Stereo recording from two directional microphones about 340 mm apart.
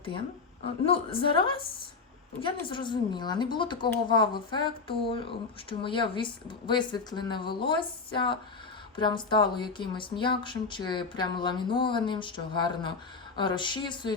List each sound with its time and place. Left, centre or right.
0.9 s speech: centre